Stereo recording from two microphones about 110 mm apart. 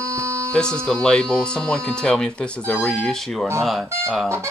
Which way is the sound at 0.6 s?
5° left (ahead or behind).